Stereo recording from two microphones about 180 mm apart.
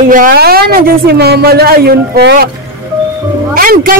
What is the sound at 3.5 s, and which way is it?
Speech, 50° right (ahead or behind).